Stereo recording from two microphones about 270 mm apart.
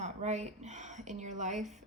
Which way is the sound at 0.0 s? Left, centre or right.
Right.